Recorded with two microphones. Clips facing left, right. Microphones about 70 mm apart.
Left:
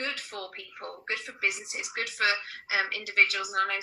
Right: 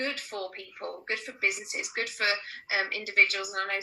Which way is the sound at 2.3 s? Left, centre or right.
Right.